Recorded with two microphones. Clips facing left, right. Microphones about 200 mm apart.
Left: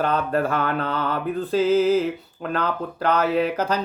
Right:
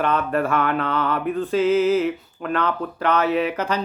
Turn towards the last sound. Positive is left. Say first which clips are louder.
# even
turn(degrees=35)  # may be behind; listen again after turning